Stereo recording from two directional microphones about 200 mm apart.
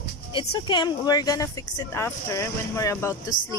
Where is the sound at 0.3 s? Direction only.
20° left (ahead or behind).